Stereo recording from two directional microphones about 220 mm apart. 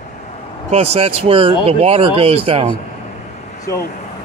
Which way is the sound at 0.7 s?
30° right (ahead or behind).